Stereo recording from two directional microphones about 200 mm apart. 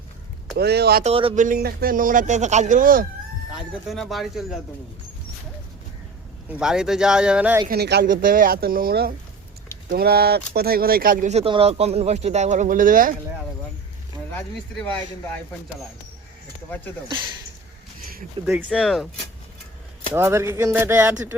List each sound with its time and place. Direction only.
0.5 s speech: 55° right (ahead or behind)
1.0 s speech: 30° right (ahead or behind)
1.5 s speech: 45° right (ahead or behind)
3.5 s speech: centre (ahead or behind)
6.5 s speech: 5° right (ahead or behind)
7.7 s speech: 55° right (ahead or behind)
14.3 s speech: 10° left (ahead or behind)
17.1 s speech: 25° right (ahead or behind)
18.4 s speech: 25° right (ahead or behind)
18.7 s speech: centre (ahead or behind)
20.1 s speech: 10° right (ahead or behind)